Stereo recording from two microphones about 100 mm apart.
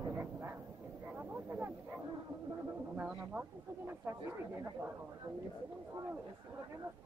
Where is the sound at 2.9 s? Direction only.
10° right (ahead or behind).